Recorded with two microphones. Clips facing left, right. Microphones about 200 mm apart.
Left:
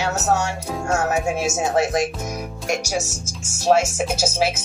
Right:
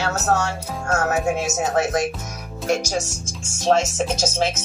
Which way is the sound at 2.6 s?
10° left (ahead or behind).